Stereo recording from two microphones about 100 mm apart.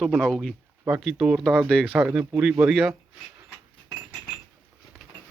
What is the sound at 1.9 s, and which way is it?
Speech, 10° right (ahead or behind).